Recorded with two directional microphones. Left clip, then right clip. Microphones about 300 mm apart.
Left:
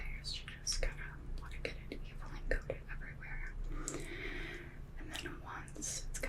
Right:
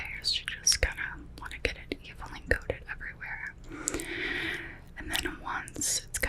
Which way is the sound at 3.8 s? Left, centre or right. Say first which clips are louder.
Right 11 dB; right.